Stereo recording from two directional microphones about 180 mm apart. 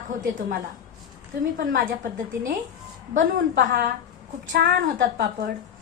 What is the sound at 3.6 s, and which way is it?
A woman's voice, 50° right (ahead or behind).